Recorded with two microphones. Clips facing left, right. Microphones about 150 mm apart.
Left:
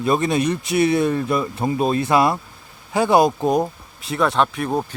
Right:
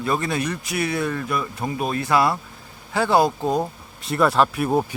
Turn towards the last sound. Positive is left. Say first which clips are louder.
# right 1 dB
turn(degrees=-10)  # may be behind; listen again after turning